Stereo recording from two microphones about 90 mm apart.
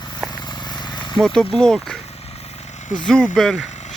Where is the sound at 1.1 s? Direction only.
5° left (ahead or behind).